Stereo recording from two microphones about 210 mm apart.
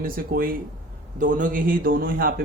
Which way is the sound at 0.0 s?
45° right (ahead or behind).